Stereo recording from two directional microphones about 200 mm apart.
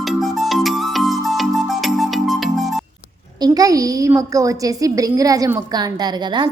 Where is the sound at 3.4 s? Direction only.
20° right (ahead or behind).